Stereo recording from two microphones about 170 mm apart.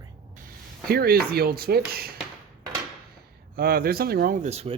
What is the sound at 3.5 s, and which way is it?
Speech, 60° right (ahead or behind).